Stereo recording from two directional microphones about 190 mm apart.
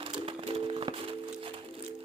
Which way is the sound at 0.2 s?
30° right (ahead or behind).